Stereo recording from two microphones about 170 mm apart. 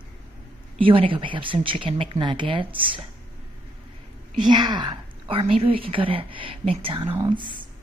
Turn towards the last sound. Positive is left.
turn(degrees=-30)  # may be behind; listen again after turning